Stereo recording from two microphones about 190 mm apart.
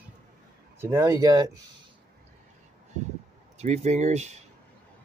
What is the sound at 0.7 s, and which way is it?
Speech, 15° right (ahead or behind).